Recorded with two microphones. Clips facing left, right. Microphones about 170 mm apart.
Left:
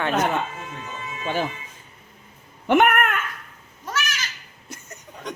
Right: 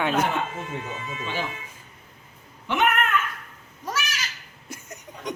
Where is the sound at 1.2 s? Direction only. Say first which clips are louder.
Left 6 dB; 50° left (ahead or behind).